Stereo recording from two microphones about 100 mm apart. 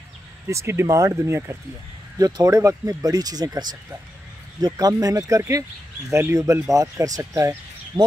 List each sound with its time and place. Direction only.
0.5 s speech: 30° right (ahead or behind)